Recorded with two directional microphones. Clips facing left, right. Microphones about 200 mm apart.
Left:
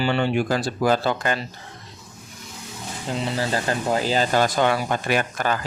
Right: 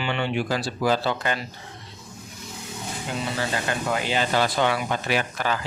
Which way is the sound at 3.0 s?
35° left (ahead or behind).